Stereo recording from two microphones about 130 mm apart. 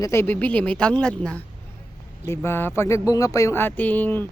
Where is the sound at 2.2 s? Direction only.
20° left (ahead or behind).